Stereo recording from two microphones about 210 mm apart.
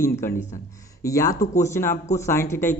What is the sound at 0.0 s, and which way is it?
A man's voice, 10° left (ahead or behind).